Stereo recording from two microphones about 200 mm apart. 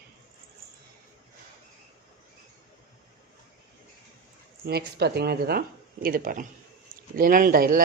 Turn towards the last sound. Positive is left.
turn(degrees=-45)  # may be behind; listen again after turning